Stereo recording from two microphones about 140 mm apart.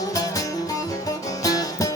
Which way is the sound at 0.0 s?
25° left (ahead or behind).